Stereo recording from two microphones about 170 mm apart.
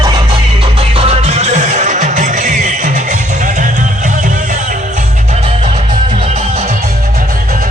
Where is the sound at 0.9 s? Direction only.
35° right (ahead or behind).